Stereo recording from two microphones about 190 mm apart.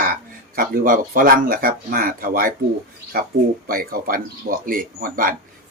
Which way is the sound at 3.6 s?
50° right (ahead or behind).